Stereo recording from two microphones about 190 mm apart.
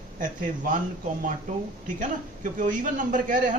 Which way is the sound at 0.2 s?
45° right (ahead or behind).